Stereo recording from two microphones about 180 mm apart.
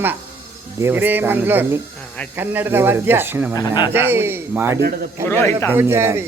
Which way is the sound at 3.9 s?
10° right (ahead or behind).